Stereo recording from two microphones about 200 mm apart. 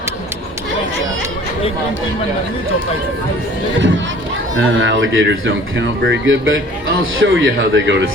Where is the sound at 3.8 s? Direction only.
65° right (ahead or behind).